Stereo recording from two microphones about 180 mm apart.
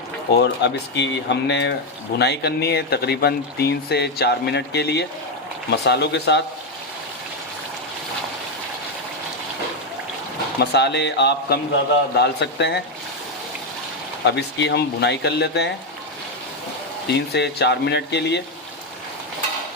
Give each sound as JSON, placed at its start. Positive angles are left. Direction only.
{"t": 0.3, "sound": "speech", "side_deg": 75}
{"t": 2.1, "sound": "speech", "side_deg": 65}
{"t": 10.6, "sound": "speech", "side_deg": 70}
{"t": 14.3, "sound": "speech", "side_deg": 70}
{"t": 17.1, "sound": "speech", "side_deg": 70}